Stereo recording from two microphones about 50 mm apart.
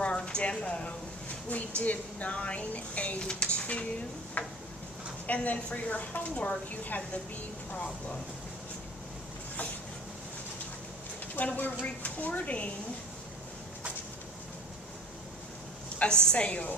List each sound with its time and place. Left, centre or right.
0.0 s a sound: centre
1.5 s a woman's voice: left
6.3 s speech: centre
6.7 s a woman's voice: left
11.3 s a woman's voice: left
16.0 s speech: left